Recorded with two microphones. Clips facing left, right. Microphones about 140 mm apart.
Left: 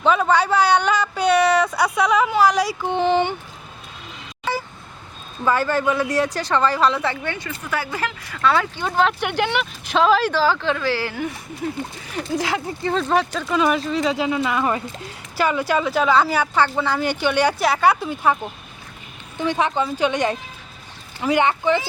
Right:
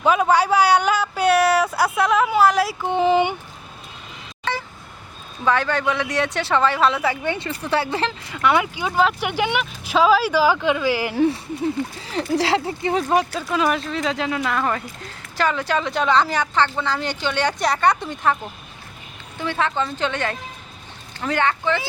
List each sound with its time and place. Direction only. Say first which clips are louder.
0.0 s a sound: even; 10° right (ahead or behind)
4.5 s vehicle: left 1 dB; 10° left (ahead or behind)
5.5 s speech: left 1 dB; 5° left (ahead or behind)
7.6 s speech: right 4 dB; 30° right (ahead or behind); by 11.1 s 15° right (ahead or behind)
11.1 s speech: right 8 dB; 30° right (ahead or behind)
12.9 s speech: even; 10° right (ahead or behind); by 18.3 s 10° left (ahead or behind)
19.4 s speech: left 2 dB; 15° left (ahead or behind)